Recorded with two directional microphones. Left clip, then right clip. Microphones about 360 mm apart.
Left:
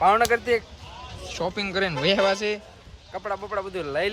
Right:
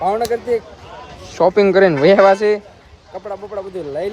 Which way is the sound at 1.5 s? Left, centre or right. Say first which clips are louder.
Right 15 dB; centre.